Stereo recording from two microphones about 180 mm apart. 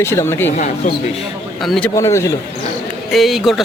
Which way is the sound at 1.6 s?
Centre (ahead or behind).